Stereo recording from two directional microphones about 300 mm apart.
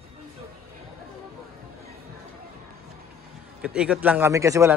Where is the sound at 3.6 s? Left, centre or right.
Centre.